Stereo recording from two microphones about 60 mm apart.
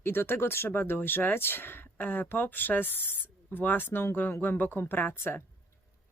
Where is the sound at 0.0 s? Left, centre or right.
Left.